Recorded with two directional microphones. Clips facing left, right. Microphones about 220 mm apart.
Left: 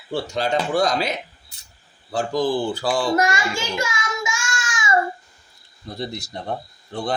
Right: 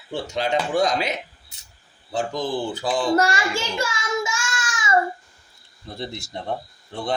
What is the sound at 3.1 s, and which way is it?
Child singing, 30° right (ahead or behind).